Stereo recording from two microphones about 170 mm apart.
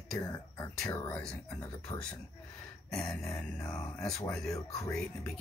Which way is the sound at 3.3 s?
15° left (ahead or behind).